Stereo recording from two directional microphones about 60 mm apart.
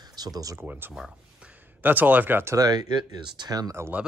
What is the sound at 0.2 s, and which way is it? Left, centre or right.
Speech, right.